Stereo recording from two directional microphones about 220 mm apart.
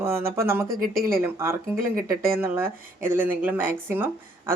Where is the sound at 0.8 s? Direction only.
40° right (ahead or behind).